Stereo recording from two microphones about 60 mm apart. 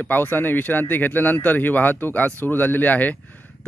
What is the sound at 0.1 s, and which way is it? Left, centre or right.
Speech, left.